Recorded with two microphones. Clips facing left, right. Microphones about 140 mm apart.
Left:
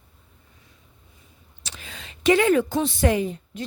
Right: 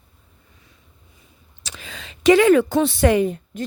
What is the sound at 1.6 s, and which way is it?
A woman's voice, 90° right.